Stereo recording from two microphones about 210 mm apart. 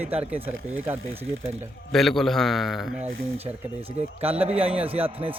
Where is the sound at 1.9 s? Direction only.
Centre (ahead or behind).